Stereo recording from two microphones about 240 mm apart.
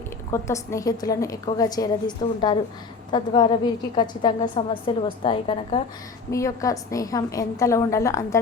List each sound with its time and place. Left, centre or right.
0.3 s a woman's voice: centre